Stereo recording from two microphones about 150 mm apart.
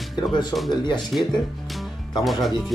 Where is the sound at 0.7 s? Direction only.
30° left (ahead or behind).